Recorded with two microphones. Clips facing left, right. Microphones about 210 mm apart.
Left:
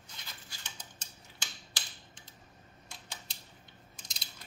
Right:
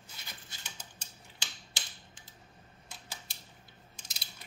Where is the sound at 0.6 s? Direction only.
10° right (ahead or behind).